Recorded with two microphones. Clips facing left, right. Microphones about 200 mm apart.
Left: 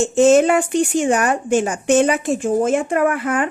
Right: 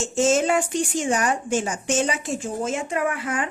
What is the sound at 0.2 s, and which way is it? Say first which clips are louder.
Speech: left 7 dB; 60° left (ahead or behind).